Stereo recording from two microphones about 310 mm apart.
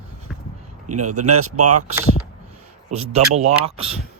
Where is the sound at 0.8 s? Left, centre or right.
Right.